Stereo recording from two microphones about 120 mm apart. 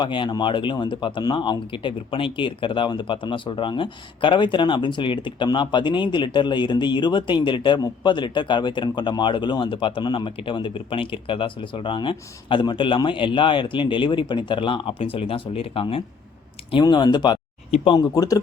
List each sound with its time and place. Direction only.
0.0 s speech: 40° left (ahead or behind)
16.8 s speech: 35° left (ahead or behind)